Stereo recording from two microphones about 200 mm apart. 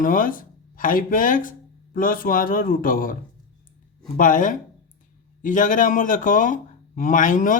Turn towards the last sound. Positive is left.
turn(degrees=40)  # may be behind; listen again after turning